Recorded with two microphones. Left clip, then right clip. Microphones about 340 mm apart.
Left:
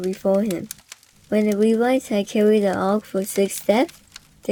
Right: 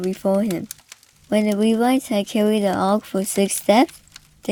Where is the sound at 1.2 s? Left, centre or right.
Centre.